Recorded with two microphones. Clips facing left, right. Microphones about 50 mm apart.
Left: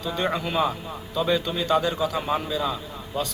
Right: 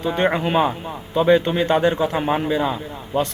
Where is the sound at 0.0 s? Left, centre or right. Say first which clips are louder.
Right 6 dB; right.